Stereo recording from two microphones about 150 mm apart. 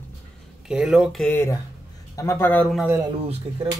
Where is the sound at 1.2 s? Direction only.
15° left (ahead or behind).